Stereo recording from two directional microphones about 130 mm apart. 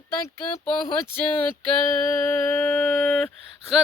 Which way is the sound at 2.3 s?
10° left (ahead or behind).